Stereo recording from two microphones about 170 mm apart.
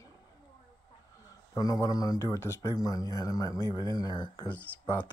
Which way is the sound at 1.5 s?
20° left (ahead or behind).